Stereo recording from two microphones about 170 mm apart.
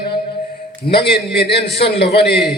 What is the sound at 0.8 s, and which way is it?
Speech, 70° left (ahead or behind).